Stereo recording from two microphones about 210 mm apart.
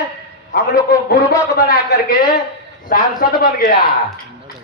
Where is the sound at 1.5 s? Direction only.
50° left (ahead or behind).